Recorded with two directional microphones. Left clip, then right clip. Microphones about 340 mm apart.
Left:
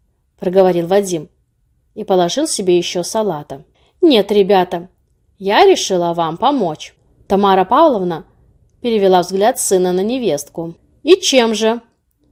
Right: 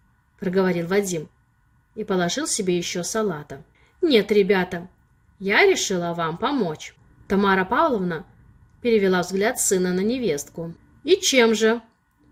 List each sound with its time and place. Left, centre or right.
0.3 s a woman's voice: centre